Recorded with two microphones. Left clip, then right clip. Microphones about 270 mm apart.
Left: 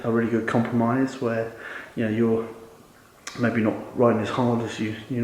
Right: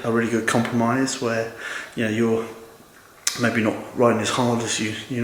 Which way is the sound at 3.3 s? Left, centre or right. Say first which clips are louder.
Right 1 dB; centre.